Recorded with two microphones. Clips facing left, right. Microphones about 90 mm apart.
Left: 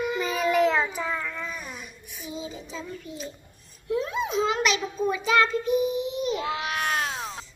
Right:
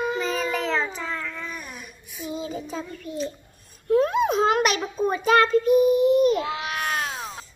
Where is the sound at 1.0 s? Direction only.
10° left (ahead or behind).